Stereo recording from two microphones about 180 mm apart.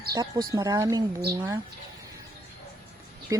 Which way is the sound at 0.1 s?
20° right (ahead or behind).